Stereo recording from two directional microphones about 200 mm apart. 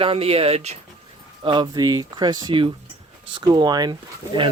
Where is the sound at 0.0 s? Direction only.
30° right (ahead or behind).